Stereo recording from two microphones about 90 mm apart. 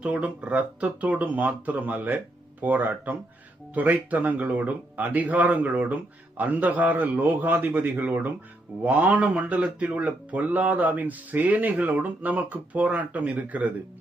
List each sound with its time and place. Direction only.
0.0 s speech: 15° right (ahead or behind)